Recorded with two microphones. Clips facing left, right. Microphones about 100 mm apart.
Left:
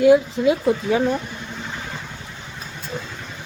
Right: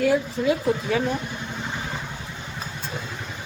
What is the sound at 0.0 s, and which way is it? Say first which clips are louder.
Speech: left 7 dB; 15° left (ahead or behind).